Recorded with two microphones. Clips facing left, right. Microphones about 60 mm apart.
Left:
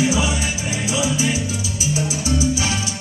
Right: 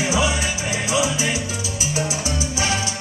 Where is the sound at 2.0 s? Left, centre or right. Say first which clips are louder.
Left 3 dB; right.